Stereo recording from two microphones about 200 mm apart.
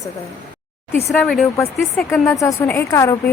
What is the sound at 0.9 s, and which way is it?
Speech, 15° left (ahead or behind).